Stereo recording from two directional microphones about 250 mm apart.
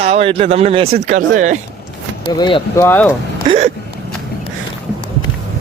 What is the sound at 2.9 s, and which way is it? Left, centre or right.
Speech, centre.